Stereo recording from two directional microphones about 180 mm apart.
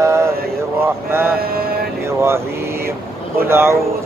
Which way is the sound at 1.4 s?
55° right (ahead or behind).